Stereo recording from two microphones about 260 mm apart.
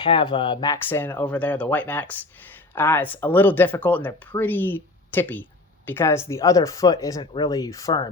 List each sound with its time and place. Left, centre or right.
0.0 s speech: centre